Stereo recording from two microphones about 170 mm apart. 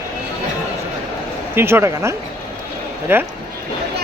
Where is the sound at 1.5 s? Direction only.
15° right (ahead or behind).